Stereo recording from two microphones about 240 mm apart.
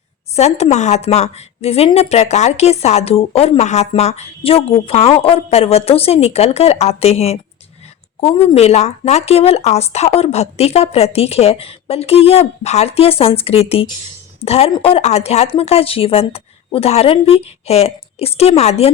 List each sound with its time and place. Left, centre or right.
0.3 s speech: left